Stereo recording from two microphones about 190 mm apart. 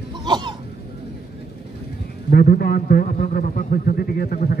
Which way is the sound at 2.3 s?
50° left (ahead or behind).